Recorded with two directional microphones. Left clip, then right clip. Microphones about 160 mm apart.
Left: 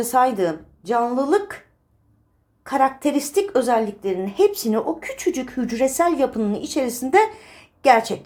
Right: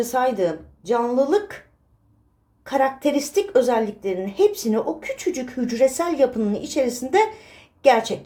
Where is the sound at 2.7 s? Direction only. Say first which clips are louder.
Left 1 dB; 10° left (ahead or behind).